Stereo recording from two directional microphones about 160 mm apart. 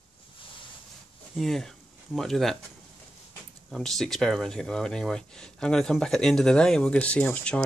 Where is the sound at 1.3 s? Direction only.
Centre (ahead or behind).